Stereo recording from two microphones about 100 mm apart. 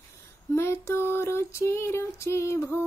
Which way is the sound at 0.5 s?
25° left (ahead or behind).